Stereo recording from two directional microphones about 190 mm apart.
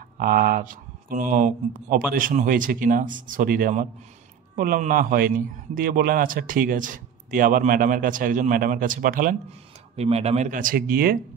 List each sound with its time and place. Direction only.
0.2 s a man's voice: 50° right (ahead or behind)
9.9 s speech: 35° right (ahead or behind); by 11.1 s 50° right (ahead or behind)